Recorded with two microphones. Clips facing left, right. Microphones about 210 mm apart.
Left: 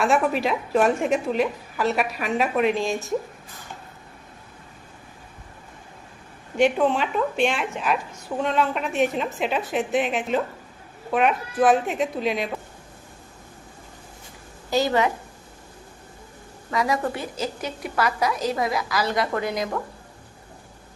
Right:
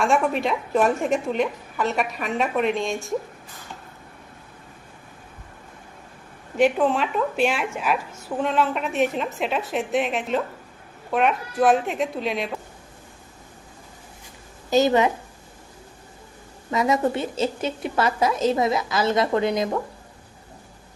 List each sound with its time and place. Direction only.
0.0 s a woman's voice: 5° left (ahead or behind)
6.6 s a woman's voice: centre (ahead or behind)
14.7 s a woman's voice: 20° right (ahead or behind)
16.7 s a woman's voice: 20° right (ahead or behind)